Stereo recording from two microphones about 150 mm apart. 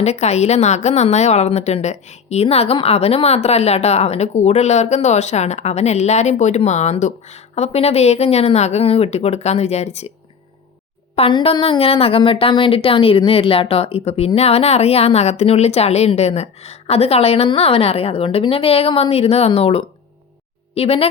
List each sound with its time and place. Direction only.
0.0 s a woman's voice: 45° left (ahead or behind)
11.1 s speech: 35° left (ahead or behind)